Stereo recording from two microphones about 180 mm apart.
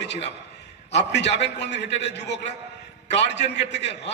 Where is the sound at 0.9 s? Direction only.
70° left (ahead or behind).